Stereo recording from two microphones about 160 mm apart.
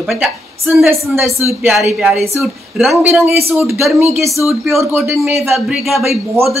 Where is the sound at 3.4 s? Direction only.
15° right (ahead or behind).